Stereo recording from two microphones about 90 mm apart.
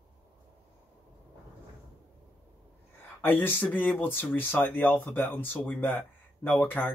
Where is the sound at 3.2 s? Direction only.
20° left (ahead or behind).